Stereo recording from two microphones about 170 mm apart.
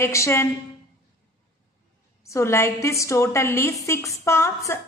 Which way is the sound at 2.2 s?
15° left (ahead or behind).